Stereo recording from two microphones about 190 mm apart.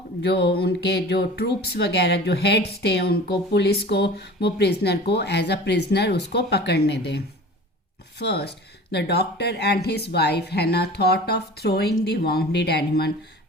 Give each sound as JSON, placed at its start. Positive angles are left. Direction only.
{"t": 0.2, "sound": "speech", "side_deg": 65}
{"t": 8.2, "sound": "speech", "side_deg": 60}